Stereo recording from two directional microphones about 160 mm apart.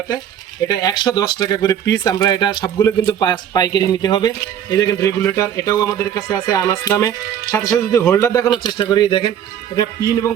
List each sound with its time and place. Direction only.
0.7 s a man's voice: 25° left (ahead or behind)